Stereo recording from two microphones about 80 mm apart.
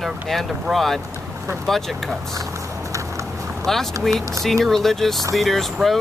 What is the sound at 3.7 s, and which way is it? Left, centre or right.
Speech, centre.